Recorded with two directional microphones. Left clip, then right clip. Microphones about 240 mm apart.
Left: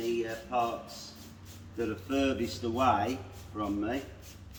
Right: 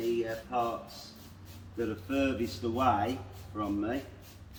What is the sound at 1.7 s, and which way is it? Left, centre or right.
A man's voice, centre.